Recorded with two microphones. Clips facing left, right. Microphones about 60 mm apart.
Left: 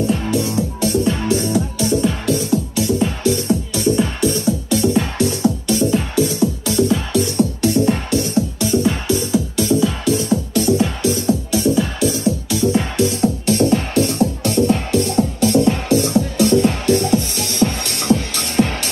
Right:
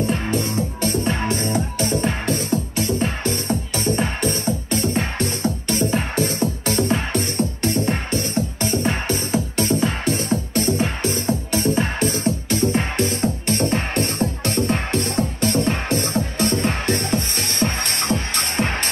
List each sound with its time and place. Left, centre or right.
0.3 s music: right